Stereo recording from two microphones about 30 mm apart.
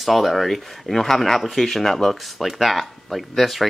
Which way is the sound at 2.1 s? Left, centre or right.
Centre.